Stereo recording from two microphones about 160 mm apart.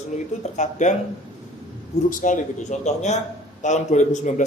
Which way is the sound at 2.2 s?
50° left (ahead or behind).